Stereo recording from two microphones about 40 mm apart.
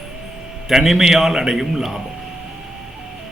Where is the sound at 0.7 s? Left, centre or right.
Centre.